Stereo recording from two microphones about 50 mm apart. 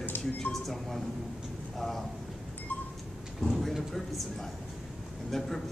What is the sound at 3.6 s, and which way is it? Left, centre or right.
A man's voice, centre.